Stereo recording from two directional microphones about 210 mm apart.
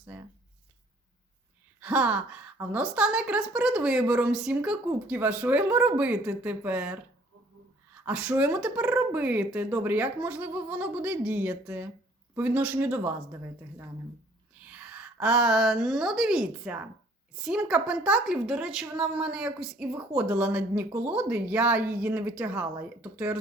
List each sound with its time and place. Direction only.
0.1 s a sound: 5° right (ahead or behind)
1.8 s a woman's voice: 5° right (ahead or behind)
8.0 s a woman's voice: 5° right (ahead or behind)